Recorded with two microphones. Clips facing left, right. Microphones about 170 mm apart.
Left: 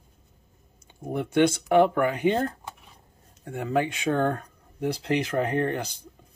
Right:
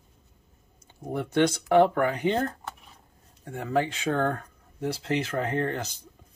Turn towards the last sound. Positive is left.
turn(degrees=10)  # may be behind; listen again after turning